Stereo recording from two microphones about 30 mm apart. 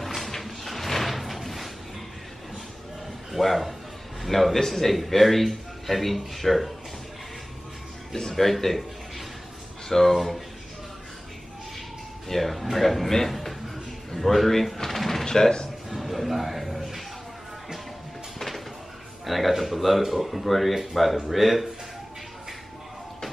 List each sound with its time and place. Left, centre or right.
0.0 s a sound: centre
3.3 s a man's voice: centre
8.4 s speech: centre
9.8 s a man's voice: centre
12.3 s a man's voice: centre
13.3 s a sound: centre
14.1 s speech: centre
15.2 s speech: centre
15.9 s a sound: centre
19.2 s a man's voice: centre